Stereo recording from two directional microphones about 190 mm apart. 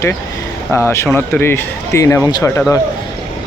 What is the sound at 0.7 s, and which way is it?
Speech, 15° left (ahead or behind).